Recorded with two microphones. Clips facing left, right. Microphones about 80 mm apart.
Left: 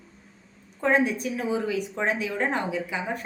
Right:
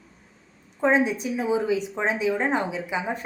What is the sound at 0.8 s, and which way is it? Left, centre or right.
A woman's voice, centre.